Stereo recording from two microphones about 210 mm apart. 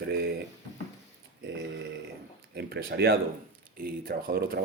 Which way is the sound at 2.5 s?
50° right (ahead or behind).